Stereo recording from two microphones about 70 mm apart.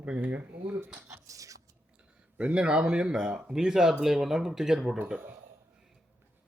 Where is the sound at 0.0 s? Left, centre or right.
Right.